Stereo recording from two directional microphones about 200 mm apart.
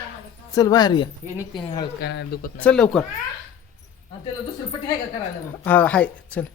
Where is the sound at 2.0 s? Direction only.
55° left (ahead or behind).